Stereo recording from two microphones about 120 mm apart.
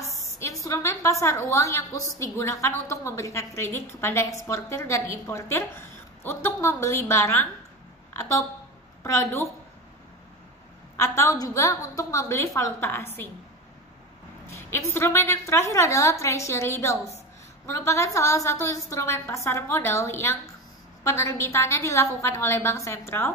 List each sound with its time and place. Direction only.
0.0 s a woman's voice: 25° left (ahead or behind)
9.0 s a woman's voice: 25° left (ahead or behind)
11.0 s a woman's voice: 25° left (ahead or behind)
14.5 s a woman's voice: 25° left (ahead or behind)